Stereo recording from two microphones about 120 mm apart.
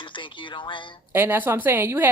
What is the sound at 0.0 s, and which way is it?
Speech, 45° left (ahead or behind).